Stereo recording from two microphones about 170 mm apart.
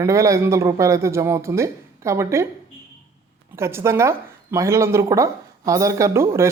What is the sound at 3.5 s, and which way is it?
Speech, 15° right (ahead or behind).